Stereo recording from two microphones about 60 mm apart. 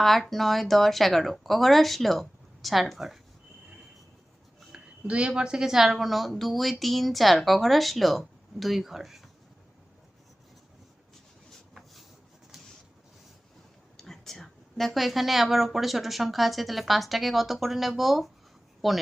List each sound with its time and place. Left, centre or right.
0.0 s a woman's voice: centre
4.7 s a woman's voice: centre
13.9 s a woman's voice: centre